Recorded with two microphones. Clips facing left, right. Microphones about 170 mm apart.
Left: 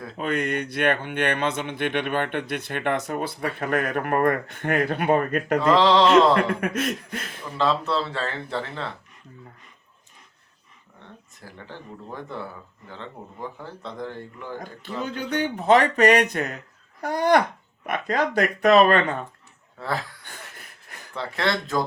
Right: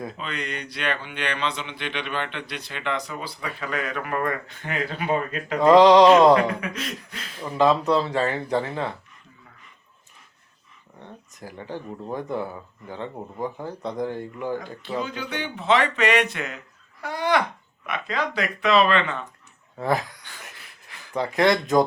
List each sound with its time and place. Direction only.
0.2 s speech: 50° left (ahead or behind)
5.5 s speech: 15° right (ahead or behind)
6.5 s speech: 50° left (ahead or behind)
7.5 s speech: 15° right (ahead or behind)
11.3 s speech: 15° right (ahead or behind)
14.6 s speech: 50° left (ahead or behind)
19.8 s speech: 15° right (ahead or behind)
20.2 s wheeze: 45° left (ahead or behind)
21.1 s speech: 15° right (ahead or behind)